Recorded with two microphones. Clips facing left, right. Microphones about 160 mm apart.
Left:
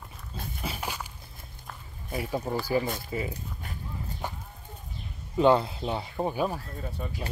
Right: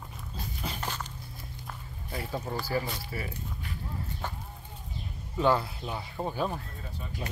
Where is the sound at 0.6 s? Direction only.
10° left (ahead or behind).